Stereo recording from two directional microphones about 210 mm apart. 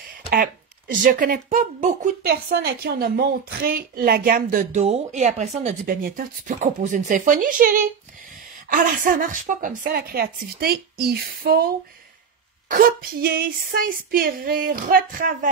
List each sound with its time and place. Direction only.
0.3 s a woman's voice: 40° right (ahead or behind)
2.5 s a woman's voice: 50° right (ahead or behind)
12.6 s a woman's voice: 40° right (ahead or behind)